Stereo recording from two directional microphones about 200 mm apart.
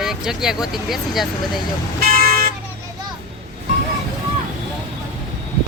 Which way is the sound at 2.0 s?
50° right (ahead or behind).